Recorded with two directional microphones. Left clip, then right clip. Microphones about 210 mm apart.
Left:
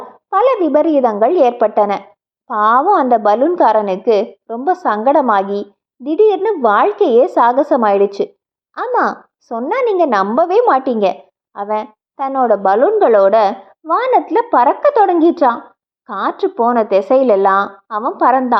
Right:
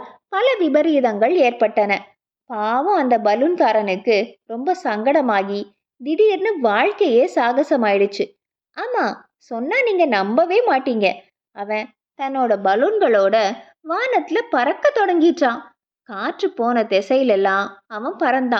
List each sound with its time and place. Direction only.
0.3 s a woman's voice: 15° right (ahead or behind)